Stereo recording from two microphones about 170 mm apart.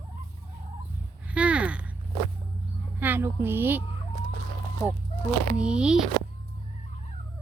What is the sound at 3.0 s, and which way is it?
Speech, 10° right (ahead or behind).